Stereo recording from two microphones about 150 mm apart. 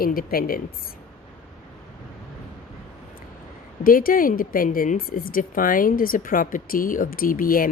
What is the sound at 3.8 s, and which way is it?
A woman's voice, 70° left (ahead or behind).